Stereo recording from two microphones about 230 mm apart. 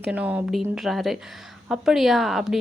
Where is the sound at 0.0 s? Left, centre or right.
Centre.